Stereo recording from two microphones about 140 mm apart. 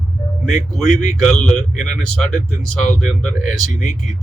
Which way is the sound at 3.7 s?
65° left (ahead or behind).